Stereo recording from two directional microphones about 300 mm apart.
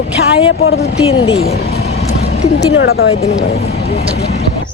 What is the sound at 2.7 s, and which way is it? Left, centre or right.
Speech, left.